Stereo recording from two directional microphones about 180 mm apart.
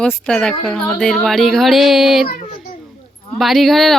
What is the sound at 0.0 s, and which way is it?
Speech, 5° left (ahead or behind).